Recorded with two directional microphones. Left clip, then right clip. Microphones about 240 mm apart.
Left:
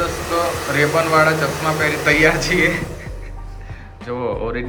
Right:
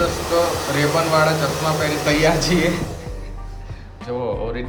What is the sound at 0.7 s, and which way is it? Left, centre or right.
Speech, centre.